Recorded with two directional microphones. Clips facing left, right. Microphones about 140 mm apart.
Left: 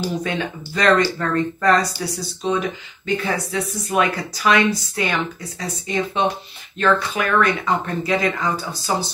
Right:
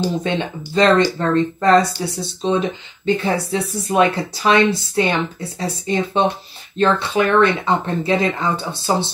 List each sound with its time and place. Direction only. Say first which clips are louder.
0.1 s speech: right 3 dB; 25° right (ahead or behind)